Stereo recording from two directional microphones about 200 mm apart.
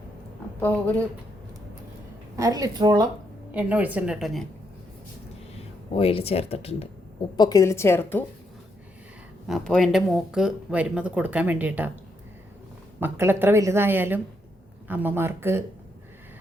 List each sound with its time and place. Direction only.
0.6 s a woman's voice: 10° left (ahead or behind)
2.3 s speech: 15° right (ahead or behind)
3.5 s a woman's voice: 5° right (ahead or behind)
5.9 s speech: 30° left (ahead or behind)
7.3 s a woman's voice: 20° left (ahead or behind)
9.5 s speech: centre (ahead or behind)
13.0 s a woman's voice: 10° right (ahead or behind)